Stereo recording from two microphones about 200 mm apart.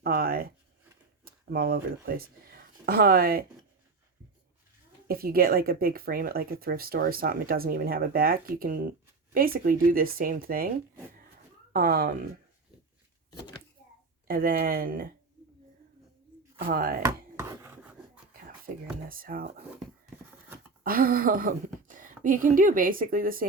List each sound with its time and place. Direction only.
0.0 s a sound: 50° right (ahead or behind)
1.2 s speech: 50° right (ahead or behind)
5.0 s speech: 50° right (ahead or behind)
11.7 s speech: 50° right (ahead or behind)
14.3 s speech: 45° right (ahead or behind)
16.6 s speech: 45° right (ahead or behind)
17.1 s chopping: 10° right (ahead or behind)
18.3 s a sound: 45° right (ahead or behind)
19.0 s speech: 45° right (ahead or behind)
20.8 s speech: 45° right (ahead or behind)